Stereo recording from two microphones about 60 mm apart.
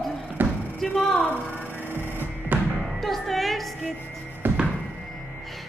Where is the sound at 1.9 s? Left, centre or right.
Left.